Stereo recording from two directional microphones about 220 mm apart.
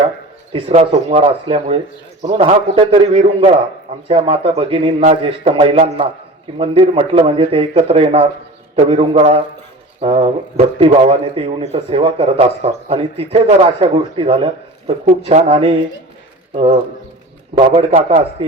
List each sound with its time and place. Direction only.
0.5 s a man's voice: 25° right (ahead or behind)
17.5 s a man's voice: 30° right (ahead or behind)